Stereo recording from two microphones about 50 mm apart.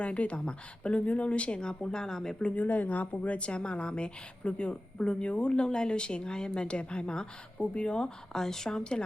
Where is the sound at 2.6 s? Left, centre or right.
Left; by 9.0 s centre.